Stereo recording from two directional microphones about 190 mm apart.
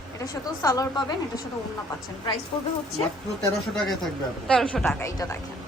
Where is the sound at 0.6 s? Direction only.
15° left (ahead or behind).